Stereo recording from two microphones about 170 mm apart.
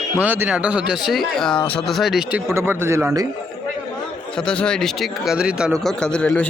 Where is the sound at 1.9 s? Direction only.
Centre (ahead or behind).